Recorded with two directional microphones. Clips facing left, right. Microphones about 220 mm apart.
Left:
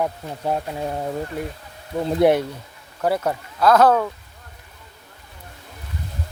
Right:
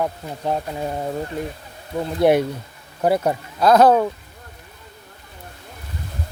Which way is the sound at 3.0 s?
15° right (ahead or behind).